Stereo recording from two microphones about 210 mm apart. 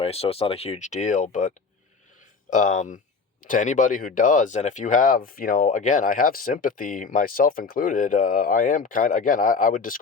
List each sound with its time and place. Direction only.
0.0 s speech: 30° left (ahead or behind)